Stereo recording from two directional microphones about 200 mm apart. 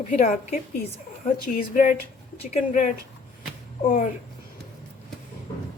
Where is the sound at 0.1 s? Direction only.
45° left (ahead or behind).